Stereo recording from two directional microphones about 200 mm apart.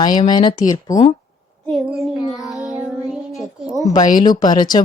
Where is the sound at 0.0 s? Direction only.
20° left (ahead or behind).